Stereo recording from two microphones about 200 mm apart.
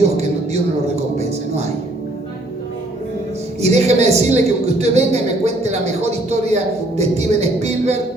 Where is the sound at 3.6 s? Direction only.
35° right (ahead or behind).